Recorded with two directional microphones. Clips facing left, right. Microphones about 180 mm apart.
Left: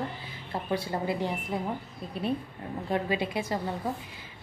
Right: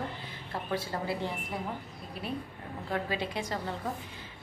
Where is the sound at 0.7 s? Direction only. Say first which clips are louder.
Left 4 dB; 15° left (ahead or behind).